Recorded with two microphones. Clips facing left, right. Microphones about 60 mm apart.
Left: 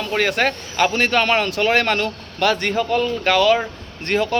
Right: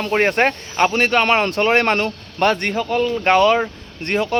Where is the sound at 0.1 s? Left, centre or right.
Right.